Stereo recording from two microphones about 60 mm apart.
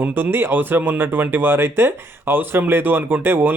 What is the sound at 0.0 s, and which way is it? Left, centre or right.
Speech, right.